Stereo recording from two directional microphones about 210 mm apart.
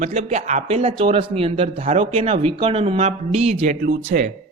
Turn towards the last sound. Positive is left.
turn(degrees=-40)  # may be behind; listen again after turning